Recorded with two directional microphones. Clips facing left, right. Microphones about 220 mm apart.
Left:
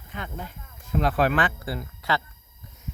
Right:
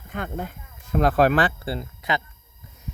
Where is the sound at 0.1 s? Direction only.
50° right (ahead or behind); by 2.2 s 20° right (ahead or behind).